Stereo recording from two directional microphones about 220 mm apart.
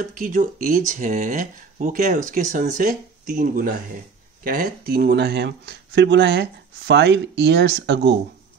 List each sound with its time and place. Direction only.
0.0 s speech: 35° right (ahead or behind)